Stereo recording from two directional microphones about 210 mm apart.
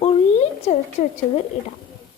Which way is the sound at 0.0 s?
30° left (ahead or behind).